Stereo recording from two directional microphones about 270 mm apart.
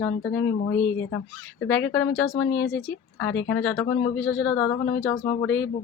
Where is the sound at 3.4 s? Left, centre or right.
Left.